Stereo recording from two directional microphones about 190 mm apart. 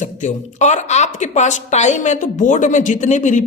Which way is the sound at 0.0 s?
40° left (ahead or behind).